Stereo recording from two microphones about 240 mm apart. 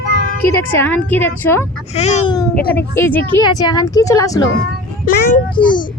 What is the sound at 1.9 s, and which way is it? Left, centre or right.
Speech, left.